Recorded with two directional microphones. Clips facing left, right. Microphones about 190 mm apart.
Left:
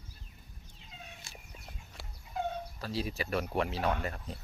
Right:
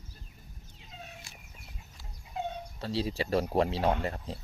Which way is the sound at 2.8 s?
30° right (ahead or behind).